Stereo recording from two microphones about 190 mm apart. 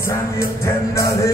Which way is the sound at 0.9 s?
15° left (ahead or behind).